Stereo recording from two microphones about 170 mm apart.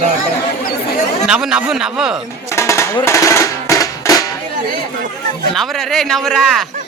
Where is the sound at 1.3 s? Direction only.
5° right (ahead or behind).